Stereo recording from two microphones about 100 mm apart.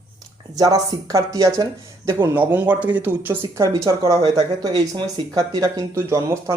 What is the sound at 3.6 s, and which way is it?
Speech, 35° right (ahead or behind).